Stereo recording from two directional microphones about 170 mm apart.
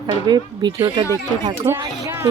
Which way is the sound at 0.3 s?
25° right (ahead or behind).